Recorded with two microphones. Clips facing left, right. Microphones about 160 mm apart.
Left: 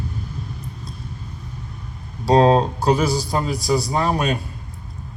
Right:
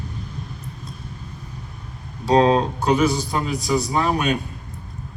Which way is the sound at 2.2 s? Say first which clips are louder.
Left 2 dB; 35° left (ahead or behind).